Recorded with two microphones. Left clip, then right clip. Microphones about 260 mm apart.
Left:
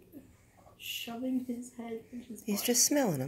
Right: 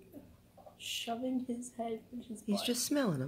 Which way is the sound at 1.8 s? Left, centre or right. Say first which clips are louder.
Right 7 dB; right.